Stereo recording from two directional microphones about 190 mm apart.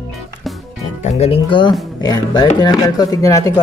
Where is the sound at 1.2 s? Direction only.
30° left (ahead or behind).